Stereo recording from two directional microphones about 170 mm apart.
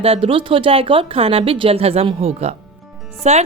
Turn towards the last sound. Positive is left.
turn(degrees=-40)  # may be behind; listen again after turning